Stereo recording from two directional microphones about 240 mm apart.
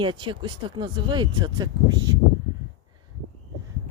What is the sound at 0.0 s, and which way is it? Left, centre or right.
Speech, centre.